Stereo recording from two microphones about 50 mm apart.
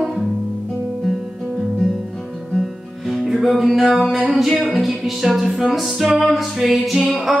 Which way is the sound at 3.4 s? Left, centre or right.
Centre.